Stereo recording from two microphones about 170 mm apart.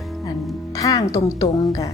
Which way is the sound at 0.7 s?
20° left (ahead or behind).